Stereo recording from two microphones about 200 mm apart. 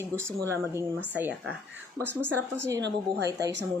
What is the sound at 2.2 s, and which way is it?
Speech, 10° right (ahead or behind).